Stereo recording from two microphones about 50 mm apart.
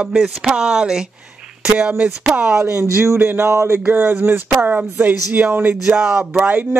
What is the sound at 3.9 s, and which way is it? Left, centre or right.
Speech, right.